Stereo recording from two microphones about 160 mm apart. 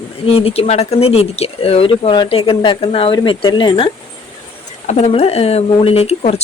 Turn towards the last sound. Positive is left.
turn(degrees=40)  # may be behind; listen again after turning